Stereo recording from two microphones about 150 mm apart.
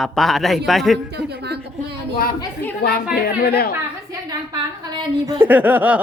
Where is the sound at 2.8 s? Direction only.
90° left.